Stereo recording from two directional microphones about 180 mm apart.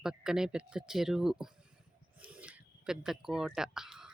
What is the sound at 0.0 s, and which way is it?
Speech, 5° right (ahead or behind).